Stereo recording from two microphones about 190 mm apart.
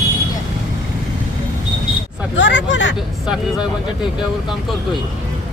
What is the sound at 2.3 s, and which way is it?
Hubbub, 75° left (ahead or behind).